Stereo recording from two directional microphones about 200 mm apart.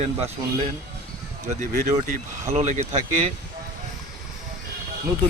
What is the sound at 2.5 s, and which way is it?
Speech, 35° right (ahead or behind).